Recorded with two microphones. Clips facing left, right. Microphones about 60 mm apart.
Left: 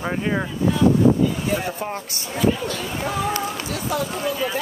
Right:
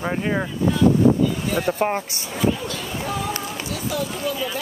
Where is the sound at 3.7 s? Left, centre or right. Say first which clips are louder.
Right 2 dB; left.